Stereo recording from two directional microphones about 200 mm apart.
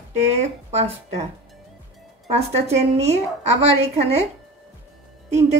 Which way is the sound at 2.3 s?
35° right (ahead or behind).